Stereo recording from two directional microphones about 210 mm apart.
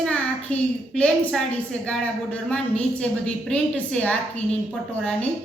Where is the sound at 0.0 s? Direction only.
5° left (ahead or behind).